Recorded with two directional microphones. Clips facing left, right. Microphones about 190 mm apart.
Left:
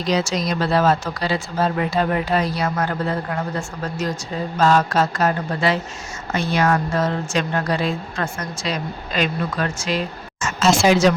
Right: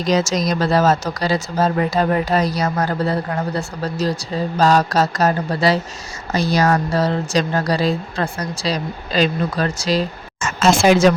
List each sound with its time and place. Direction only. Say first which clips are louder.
0.0 s speech: right 3 dB; 45° right (ahead or behind)
10.6 s speech: right 2 dB; 55° right (ahead or behind)